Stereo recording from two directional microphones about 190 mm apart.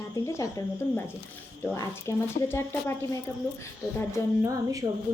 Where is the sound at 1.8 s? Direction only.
15° left (ahead or behind).